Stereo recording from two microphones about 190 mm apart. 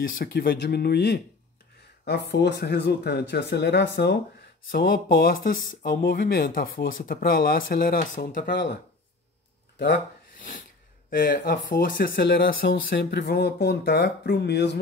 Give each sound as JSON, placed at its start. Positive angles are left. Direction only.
{"t": 0.2, "sound": "speech", "side_deg": 55}
{"t": 4.6, "sound": "speech", "side_deg": 50}
{"t": 11.1, "sound": "speech", "side_deg": 50}